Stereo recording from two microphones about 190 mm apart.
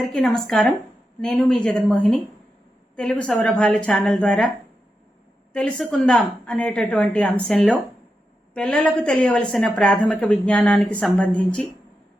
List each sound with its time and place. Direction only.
0.1 s a woman's voice: centre (ahead or behind)
5.5 s a woman's voice: 5° left (ahead or behind)